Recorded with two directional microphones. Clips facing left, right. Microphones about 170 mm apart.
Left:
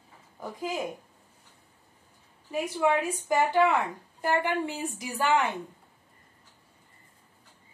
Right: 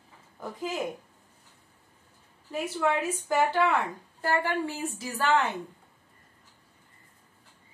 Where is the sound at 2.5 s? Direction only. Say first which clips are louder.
Left 2 dB; 15° left (ahead or behind).